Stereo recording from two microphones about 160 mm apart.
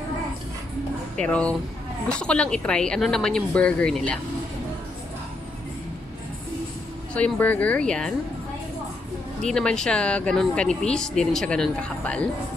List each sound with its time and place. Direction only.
1.1 s speech: 10° left (ahead or behind)
7.2 s speech: 10° left (ahead or behind)
9.4 s speech: 5° left (ahead or behind)